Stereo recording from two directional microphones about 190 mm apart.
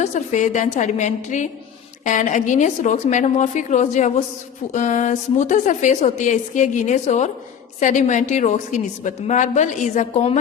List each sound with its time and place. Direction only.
0.0 s a woman's voice: 40° left (ahead or behind)